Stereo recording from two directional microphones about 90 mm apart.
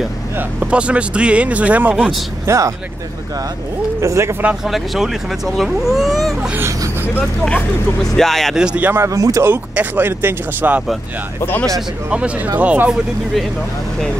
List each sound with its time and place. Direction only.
0.4 s speech: 15° right (ahead or behind)
2.4 s speech: 35° right (ahead or behind)
4.0 s speech: 30° right (ahead or behind)
4.6 s speech: centre (ahead or behind)
8.5 s speech: 15° right (ahead or behind)
9.0 s speech: 40° right (ahead or behind)
9.4 s speech: 20° right (ahead or behind)
12.1 s speech: 15° right (ahead or behind)